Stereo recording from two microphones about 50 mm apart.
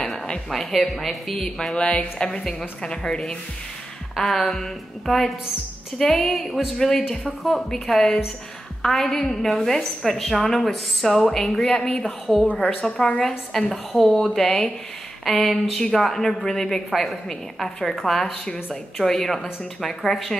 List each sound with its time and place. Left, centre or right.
0.5 s a woman's voice: centre
1.8 s a woman's voice: left; by 20.3 s centre